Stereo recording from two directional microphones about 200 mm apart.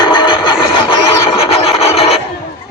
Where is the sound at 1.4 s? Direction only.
30° left (ahead or behind).